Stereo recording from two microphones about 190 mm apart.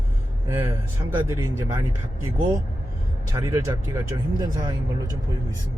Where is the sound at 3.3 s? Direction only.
20° right (ahead or behind).